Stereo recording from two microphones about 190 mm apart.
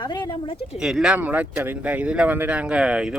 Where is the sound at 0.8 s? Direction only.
Centre (ahead or behind).